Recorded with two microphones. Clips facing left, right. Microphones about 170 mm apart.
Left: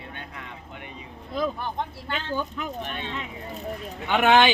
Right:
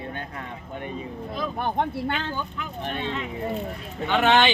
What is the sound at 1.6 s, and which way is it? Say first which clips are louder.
Speech: right 6 dB; 60° right (ahead or behind).